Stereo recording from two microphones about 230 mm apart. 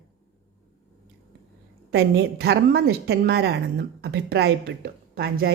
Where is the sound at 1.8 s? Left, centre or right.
Right.